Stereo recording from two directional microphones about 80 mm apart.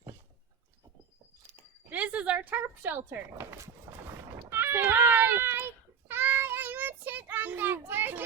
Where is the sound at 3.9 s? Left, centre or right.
Right.